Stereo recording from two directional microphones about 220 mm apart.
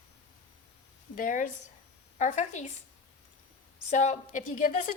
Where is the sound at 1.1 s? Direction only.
35° left (ahead or behind).